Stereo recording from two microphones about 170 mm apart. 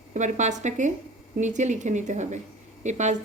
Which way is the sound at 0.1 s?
45° right (ahead or behind).